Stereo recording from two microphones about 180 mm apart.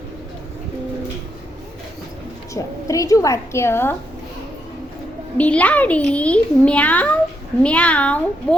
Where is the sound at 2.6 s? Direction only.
20° left (ahead or behind).